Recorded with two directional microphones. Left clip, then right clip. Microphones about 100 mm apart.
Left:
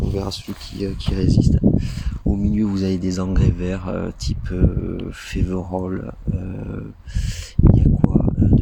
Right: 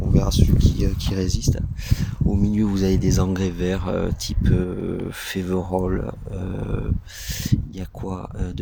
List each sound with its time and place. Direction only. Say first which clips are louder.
0.1 s speech: right 3 dB; 25° right (ahead or behind)
0.8 s speech: left 1 dB; 40° right (ahead or behind)
2.3 s speech: left 1 dB; 25° right (ahead or behind); by 6.0 s 40° right (ahead or behind)
7.5 s speech: left 10 dB; 40° right (ahead or behind)